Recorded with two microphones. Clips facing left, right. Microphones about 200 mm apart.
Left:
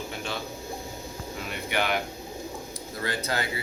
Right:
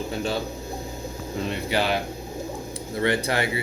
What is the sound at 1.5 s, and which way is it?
Speech, 30° right (ahead or behind).